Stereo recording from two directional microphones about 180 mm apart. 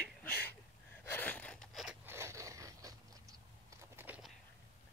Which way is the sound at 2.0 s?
15° right (ahead or behind).